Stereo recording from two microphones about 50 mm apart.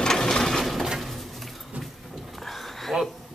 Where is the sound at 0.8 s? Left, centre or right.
Centre.